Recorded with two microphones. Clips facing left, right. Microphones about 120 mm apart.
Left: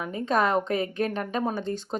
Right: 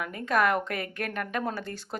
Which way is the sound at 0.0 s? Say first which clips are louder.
Left 1 dB; 25° left (ahead or behind).